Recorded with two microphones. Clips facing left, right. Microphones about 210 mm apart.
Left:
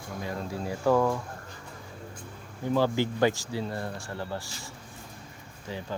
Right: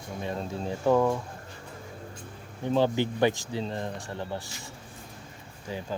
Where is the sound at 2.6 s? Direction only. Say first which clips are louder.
Right 1 dB; 20° right (ahead or behind).